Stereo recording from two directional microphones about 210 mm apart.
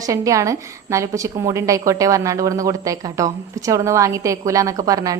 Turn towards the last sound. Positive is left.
turn(degrees=-15)  # may be behind; listen again after turning